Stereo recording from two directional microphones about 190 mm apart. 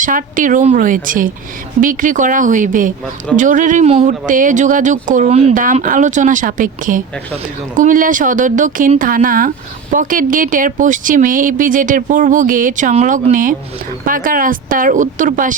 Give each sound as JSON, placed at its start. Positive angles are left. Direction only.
{"t": 0.0, "sound": "speech", "side_deg": -45}